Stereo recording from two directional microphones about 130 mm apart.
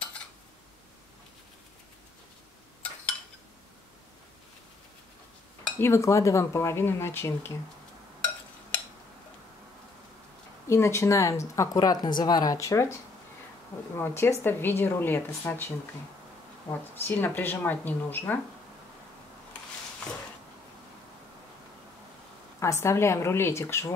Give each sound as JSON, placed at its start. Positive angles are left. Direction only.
{"t": 5.8, "sound": "speech", "side_deg": 20}
{"t": 10.7, "sound": "a woman's voice", "side_deg": 20}
{"t": 17.0, "sound": "a woman's voice", "side_deg": 15}
{"t": 22.6, "sound": "speech", "side_deg": 20}